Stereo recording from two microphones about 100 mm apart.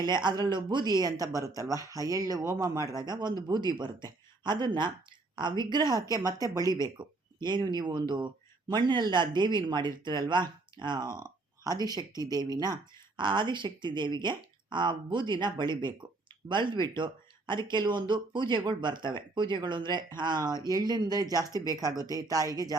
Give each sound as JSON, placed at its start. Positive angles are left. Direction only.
{"t": 0.0, "sound": "speech", "side_deg": -45}